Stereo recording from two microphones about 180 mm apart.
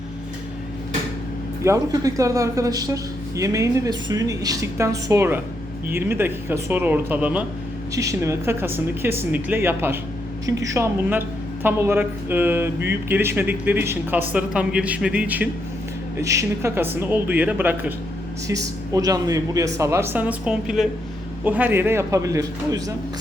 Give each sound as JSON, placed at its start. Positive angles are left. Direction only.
{"t": 1.6, "sound": "speech", "side_deg": -20}